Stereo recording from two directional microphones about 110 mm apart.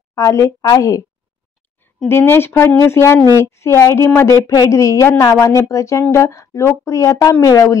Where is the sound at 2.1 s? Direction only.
20° left (ahead or behind).